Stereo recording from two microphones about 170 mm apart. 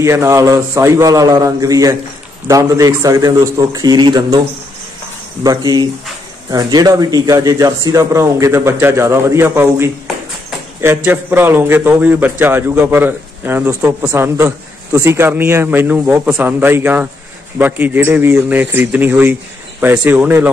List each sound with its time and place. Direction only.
0.0 s a man's voice: 15° right (ahead or behind)
5.4 s a man's voice: 20° right (ahead or behind)
11.1 s a man's voice: 10° right (ahead or behind)